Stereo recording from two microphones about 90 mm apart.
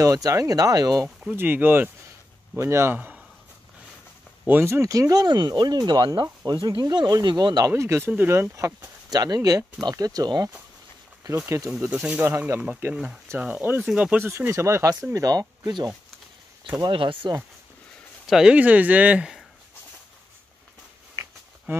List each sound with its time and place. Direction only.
0.0 s speech: 40° right (ahead or behind)
1.3 s speech: 20° right (ahead or behind)
4.5 s speech: 30° right (ahead or behind); by 6.2 s 60° right (ahead or behind)
6.4 s speech: 45° right (ahead or behind)
7.7 s speech: 30° right (ahead or behind)
11.2 s speech: 30° right (ahead or behind)
11.9 s speech: 15° right (ahead or behind)
12.9 s speech: 10° right (ahead or behind)
14.2 s speech: 30° right (ahead or behind); by 15.9 s 45° right (ahead or behind)
16.9 s speech: 70° right (ahead or behind)
18.2 s a sound: 5° right (ahead or behind)
18.5 s speech: 15° right (ahead or behind)
21.7 s speech: 25° right (ahead or behind)